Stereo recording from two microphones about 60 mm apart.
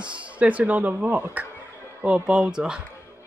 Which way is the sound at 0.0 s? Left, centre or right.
Right.